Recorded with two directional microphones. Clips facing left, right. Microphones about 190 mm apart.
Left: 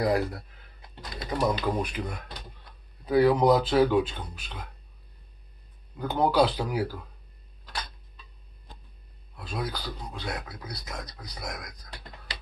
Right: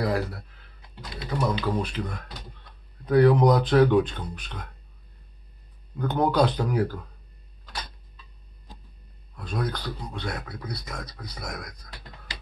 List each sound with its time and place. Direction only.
0.0 s speech: 15° left (ahead or behind)
1.1 s speech: 45° left (ahead or behind)
1.8 s speech: 15° left (ahead or behind)
5.9 s speech: 5° left (ahead or behind)
9.4 s speech: 5° left (ahead or behind)